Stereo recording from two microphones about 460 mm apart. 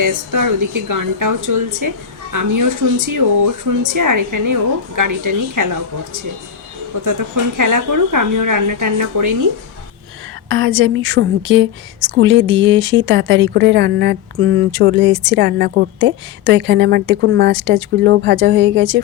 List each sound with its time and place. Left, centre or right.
0.0 s speech: right
7.0 s speech: right
10.5 s a woman's voice: right